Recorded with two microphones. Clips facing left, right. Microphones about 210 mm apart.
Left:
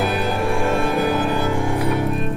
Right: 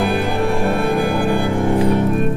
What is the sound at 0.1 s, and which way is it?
Music, 50° right (ahead or behind).